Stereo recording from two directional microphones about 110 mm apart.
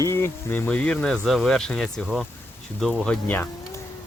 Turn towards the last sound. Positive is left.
turn(degrees=15)  # may be behind; listen again after turning